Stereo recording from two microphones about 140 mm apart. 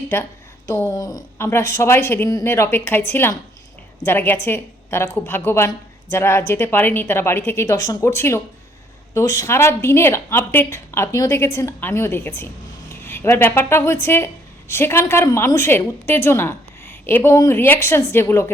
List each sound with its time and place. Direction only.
0.1 s a woman's voice: 20° left (ahead or behind)